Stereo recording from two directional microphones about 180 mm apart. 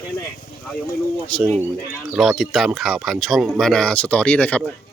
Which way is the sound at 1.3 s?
5° left (ahead or behind).